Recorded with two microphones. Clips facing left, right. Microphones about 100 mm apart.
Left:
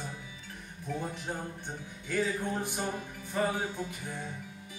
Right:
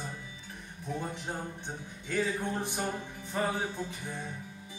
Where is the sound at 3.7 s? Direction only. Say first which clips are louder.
Even; 10° left (ahead or behind).